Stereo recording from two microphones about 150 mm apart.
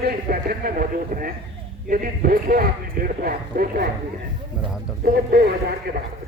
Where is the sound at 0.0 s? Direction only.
75° right (ahead or behind).